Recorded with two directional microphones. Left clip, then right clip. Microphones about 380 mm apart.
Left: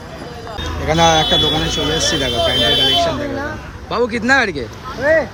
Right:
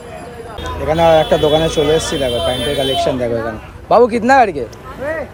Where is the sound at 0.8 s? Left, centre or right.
Centre.